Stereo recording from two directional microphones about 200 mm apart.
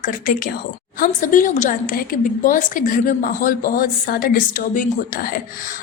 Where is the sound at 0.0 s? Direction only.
45° left (ahead or behind).